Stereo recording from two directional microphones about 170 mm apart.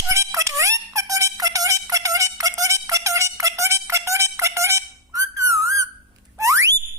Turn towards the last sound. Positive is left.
turn(degrees=-15)  # may be behind; listen again after turning